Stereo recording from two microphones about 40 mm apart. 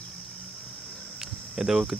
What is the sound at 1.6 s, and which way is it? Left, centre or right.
Speech, centre.